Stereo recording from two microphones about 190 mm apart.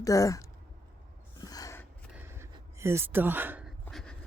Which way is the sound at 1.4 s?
20° left (ahead or behind).